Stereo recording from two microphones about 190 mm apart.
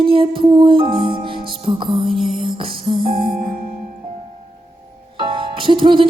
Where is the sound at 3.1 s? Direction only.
50° right (ahead or behind).